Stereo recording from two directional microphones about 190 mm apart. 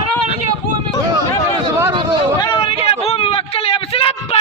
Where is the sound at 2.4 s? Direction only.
30° left (ahead or behind).